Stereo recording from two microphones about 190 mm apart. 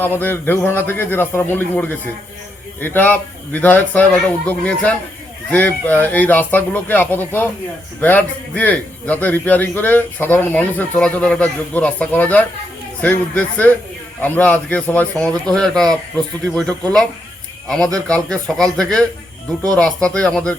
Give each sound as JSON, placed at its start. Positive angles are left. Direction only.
{"t": 0.0, "sound": "a man's voice", "side_deg": 10}